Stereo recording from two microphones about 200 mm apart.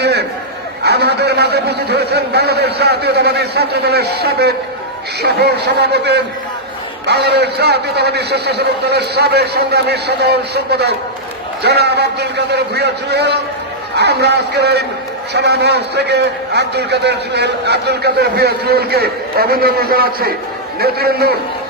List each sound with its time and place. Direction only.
0.0 s chatter: 55° right (ahead or behind)
0.9 s a man's voice: 55° right (ahead or behind)